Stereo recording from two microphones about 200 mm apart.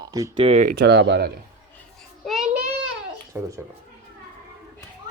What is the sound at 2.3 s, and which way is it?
Child singing, 5° right (ahead or behind).